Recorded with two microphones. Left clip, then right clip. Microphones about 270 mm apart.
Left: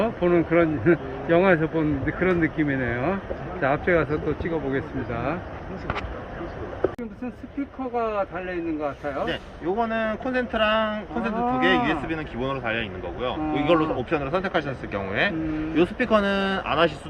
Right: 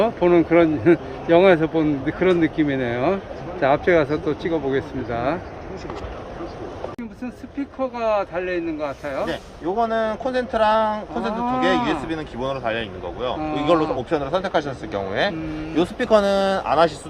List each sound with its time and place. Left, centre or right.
0.0 s a man's voice: centre
7.9 s speech: centre
9.2 s a man's voice: right